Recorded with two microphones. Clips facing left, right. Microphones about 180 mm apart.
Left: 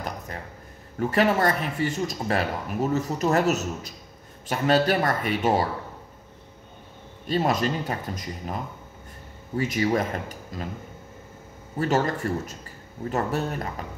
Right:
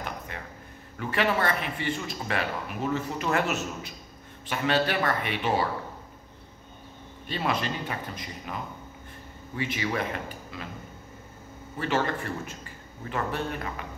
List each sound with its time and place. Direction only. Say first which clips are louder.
0.9 s speech: left 5 dB; 40° left (ahead or behind)
7.2 s speech: left 6 dB; 45° left (ahead or behind)
9.6 s speech: left 6 dB; 40° left (ahead or behind)
11.8 s speech: left 4 dB; 40° left (ahead or behind)